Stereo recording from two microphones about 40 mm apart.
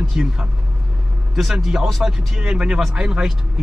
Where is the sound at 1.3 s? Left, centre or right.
Centre.